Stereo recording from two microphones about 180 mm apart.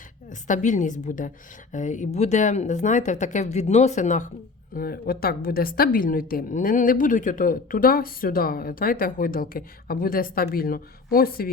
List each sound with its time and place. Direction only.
0.3 s a woman's voice: 45° left (ahead or behind)
4.7 s a woman's voice: 55° left (ahead or behind)